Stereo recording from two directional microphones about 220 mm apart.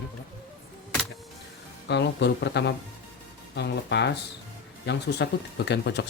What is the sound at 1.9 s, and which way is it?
Speech, 50° left (ahead or behind).